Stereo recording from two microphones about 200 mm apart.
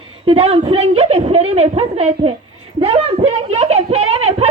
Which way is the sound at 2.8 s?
30° right (ahead or behind).